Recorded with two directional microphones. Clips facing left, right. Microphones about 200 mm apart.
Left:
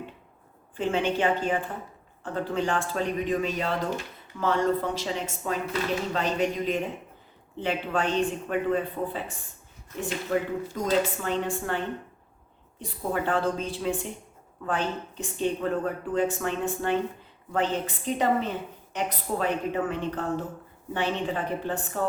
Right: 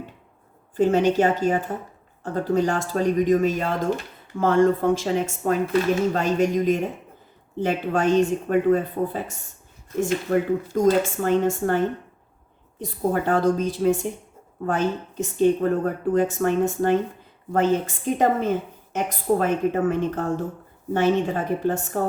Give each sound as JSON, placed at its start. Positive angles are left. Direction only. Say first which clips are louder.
{"t": 0.8, "sound": "a woman's voice", "louder": "right 7 dB", "side_deg": -40}